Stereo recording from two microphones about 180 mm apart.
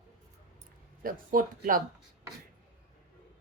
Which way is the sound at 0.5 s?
50° right (ahead or behind).